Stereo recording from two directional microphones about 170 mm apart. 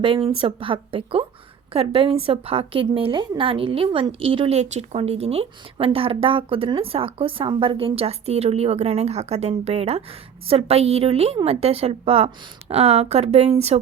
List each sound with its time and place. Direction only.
0.3 s a woman's voice: 30° right (ahead or behind)